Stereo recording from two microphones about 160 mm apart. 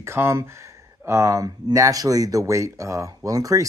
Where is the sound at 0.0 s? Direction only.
15° right (ahead or behind).